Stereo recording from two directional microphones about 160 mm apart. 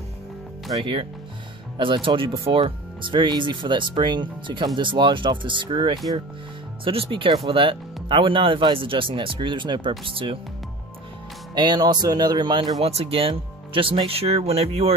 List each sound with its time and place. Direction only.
0.7 s speech: 30° right (ahead or behind)
11.5 s speech: 25° right (ahead or behind)